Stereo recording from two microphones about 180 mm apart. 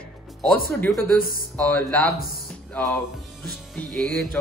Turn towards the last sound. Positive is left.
turn(degrees=0)  # may be behind; listen again after turning